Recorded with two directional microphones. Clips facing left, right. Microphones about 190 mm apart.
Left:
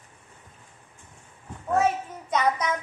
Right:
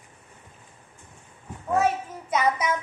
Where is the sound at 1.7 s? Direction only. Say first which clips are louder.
Even; centre (ahead or behind).